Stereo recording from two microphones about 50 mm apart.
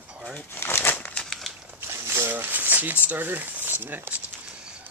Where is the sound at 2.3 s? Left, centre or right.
Right.